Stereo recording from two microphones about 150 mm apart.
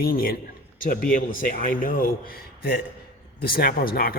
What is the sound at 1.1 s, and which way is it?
Speech, 65° left (ahead or behind).